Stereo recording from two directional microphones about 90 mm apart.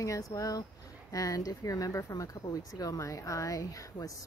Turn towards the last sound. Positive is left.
turn(degrees=40)  # may be behind; listen again after turning